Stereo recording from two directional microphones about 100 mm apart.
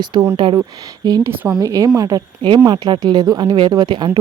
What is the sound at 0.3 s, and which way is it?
Speech, 50° right (ahead or behind).